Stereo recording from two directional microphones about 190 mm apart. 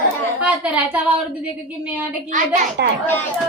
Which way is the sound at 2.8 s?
60° right (ahead or behind).